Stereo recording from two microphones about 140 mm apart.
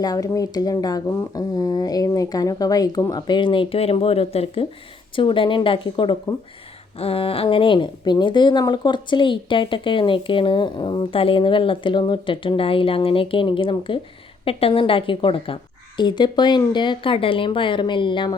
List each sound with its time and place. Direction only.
0.0 s speech: 25° left (ahead or behind)